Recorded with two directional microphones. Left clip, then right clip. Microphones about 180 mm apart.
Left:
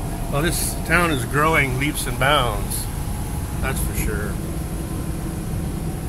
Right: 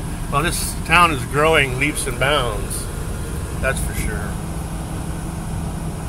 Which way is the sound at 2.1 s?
20° left (ahead or behind).